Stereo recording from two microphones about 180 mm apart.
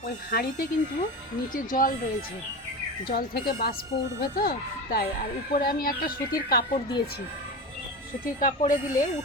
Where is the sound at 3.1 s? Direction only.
55° left (ahead or behind).